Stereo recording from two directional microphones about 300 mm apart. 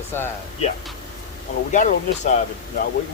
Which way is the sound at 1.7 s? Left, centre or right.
Left.